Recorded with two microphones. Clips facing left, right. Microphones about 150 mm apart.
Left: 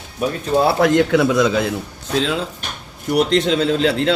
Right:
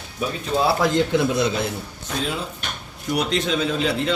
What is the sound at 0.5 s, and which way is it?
A man's voice, 60° left (ahead or behind).